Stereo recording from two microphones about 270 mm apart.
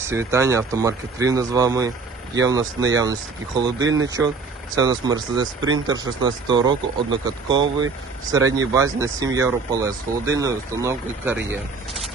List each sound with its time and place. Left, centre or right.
0.0 s speech: centre
3.8 s speech: right
4.7 s speech: centre